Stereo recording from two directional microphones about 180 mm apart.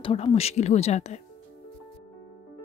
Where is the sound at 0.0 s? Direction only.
30° left (ahead or behind).